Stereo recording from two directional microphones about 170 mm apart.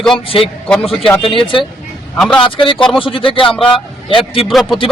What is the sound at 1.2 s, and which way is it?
Speech, 30° left (ahead or behind).